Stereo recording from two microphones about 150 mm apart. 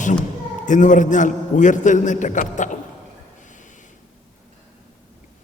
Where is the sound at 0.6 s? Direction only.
55° left (ahead or behind).